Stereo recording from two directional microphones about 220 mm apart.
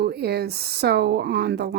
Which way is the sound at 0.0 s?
45° right (ahead or behind).